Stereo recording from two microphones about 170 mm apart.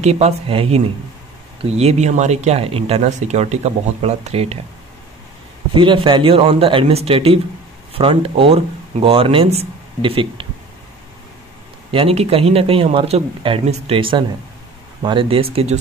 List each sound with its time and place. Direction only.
0.0 s speech: 40° right (ahead or behind)
5.8 s speech: 30° right (ahead or behind)
11.9 s speech: 35° right (ahead or behind)